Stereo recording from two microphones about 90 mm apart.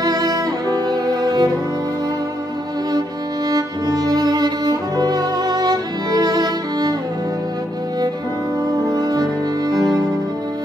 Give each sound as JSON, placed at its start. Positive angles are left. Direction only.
{"t": 0.0, "sound": "music", "side_deg": -45}
{"t": 3.4, "sound": "music", "side_deg": -45}
{"t": 8.9, "sound": "music", "side_deg": -45}